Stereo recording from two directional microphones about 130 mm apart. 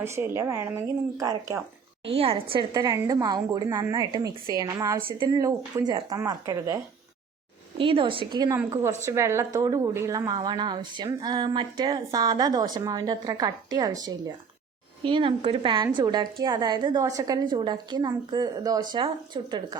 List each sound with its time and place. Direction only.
0.0 s a woman's voice: 20° right (ahead or behind)
2.1 s a woman's voice: 45° right (ahead or behind)
2.7 s a woman's voice: 30° right (ahead or behind)
7.8 s a woman's voice: 40° right (ahead or behind)
8.5 s a woman's voice: 20° right (ahead or behind)